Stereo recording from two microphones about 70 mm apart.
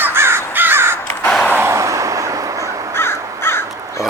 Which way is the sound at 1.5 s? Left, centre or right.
Right.